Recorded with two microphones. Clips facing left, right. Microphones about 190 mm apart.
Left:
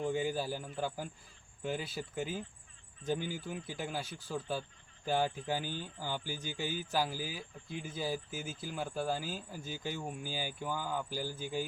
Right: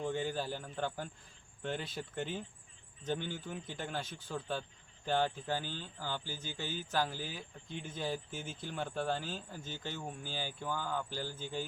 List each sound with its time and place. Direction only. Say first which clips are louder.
0.0 s speech: left 2 dB; 10° left (ahead or behind)